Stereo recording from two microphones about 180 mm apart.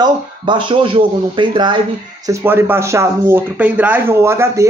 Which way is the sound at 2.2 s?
15° right (ahead or behind).